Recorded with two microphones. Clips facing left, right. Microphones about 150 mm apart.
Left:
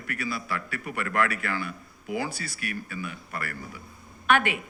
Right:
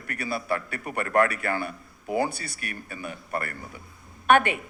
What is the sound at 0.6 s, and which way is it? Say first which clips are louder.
A woman's voice: right 2 dB; 40° right (ahead or behind).